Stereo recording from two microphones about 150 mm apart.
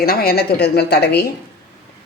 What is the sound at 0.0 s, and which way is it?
A woman's voice, 90° left.